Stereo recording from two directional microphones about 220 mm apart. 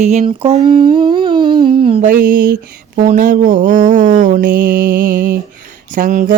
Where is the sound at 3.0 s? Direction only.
35° right (ahead or behind).